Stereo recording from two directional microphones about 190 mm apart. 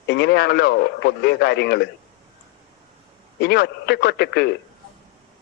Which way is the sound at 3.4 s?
60° left (ahead or behind).